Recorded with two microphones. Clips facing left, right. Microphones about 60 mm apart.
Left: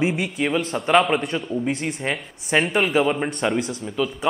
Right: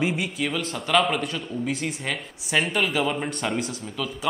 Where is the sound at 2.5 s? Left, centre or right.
Left.